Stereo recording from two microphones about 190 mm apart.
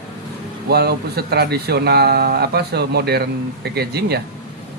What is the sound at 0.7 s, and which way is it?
Speech, 55° right (ahead or behind).